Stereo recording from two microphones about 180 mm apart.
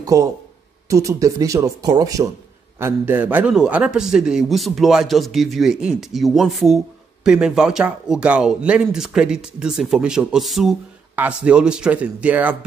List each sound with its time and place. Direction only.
0.0 s speech: 20° right (ahead or behind)